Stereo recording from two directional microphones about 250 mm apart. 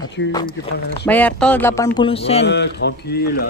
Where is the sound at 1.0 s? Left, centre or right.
Centre; by 2.4 s left.